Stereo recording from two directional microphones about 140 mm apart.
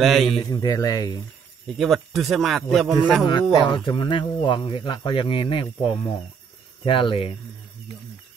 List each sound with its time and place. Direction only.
0.0 s a man's voice: centre (ahead or behind)
0.5 s speech: 30° left (ahead or behind)
1.8 s a man's voice: centre (ahead or behind)
3.6 s speech: 35° left (ahead or behind)